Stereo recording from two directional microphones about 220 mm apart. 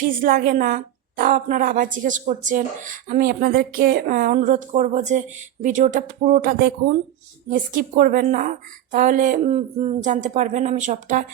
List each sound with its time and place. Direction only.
0.0 s a woman's voice: 40° right (ahead or behind)